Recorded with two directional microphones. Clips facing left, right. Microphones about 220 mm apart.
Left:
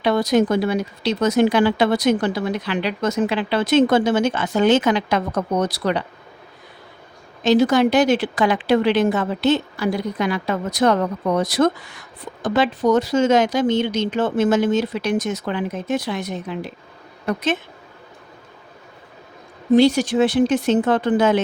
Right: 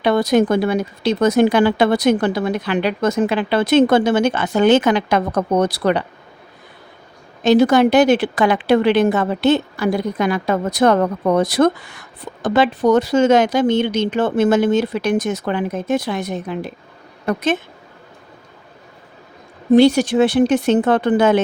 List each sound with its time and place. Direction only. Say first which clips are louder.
0.0 s speech: right 2 dB; 60° right (ahead or behind)
7.4 s a woman's voice: right 3 dB; 60° right (ahead or behind)
19.7 s speech: right 3 dB; 60° right (ahead or behind)